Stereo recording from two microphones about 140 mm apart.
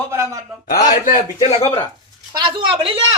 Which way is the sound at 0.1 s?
20° right (ahead or behind).